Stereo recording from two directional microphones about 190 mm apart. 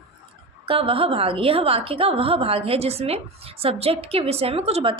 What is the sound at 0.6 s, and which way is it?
A woman's voice, 30° right (ahead or behind).